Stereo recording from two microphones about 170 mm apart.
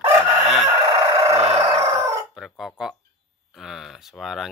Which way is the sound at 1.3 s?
35° right (ahead or behind).